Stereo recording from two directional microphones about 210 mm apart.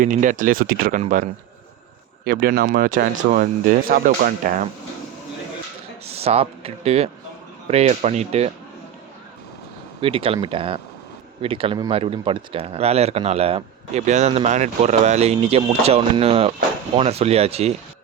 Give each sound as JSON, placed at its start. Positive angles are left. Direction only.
{"t": 0.0, "sound": "speech", "side_deg": -40}
{"t": 2.2, "sound": "speech", "side_deg": -45}
{"t": 6.1, "sound": "speech", "side_deg": -30}
{"t": 10.0, "sound": "speech", "side_deg": -25}